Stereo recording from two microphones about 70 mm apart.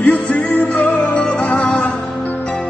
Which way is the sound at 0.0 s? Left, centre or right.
Left.